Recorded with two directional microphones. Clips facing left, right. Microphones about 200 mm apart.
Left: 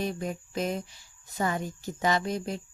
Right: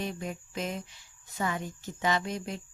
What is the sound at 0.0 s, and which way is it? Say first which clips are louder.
Speech: left 4 dB; 40° left (ahead or behind).